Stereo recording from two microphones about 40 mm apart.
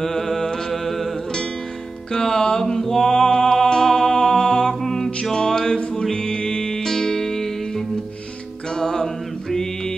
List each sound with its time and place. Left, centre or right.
0.0 s music: centre
2.1 s music: centre
5.8 s music: left
9.0 s a sound: centre